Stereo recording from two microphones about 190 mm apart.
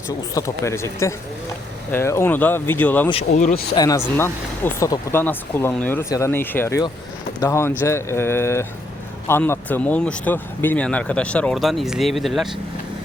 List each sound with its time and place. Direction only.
0.3 s speech: 15° left (ahead or behind)
3.1 s speech: 35° left (ahead or behind)
3.8 s speech: 20° left (ahead or behind); by 12.5 s centre (ahead or behind)